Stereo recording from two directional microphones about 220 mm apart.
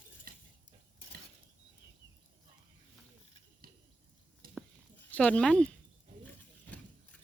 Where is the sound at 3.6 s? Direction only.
40° right (ahead or behind).